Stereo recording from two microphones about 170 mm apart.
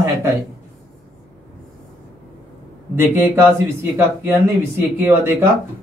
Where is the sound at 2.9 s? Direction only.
15° right (ahead or behind).